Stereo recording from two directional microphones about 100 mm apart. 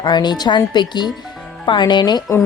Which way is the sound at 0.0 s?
45° left (ahead or behind).